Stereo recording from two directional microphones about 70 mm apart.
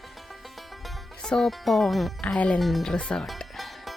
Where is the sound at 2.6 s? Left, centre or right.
Centre.